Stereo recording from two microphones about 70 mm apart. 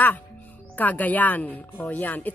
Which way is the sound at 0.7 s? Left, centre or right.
Left.